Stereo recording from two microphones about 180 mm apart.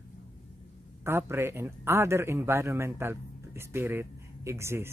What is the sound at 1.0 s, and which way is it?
Speech, 15° right (ahead or behind).